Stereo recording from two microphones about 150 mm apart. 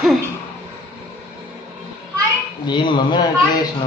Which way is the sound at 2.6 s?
30° left (ahead or behind).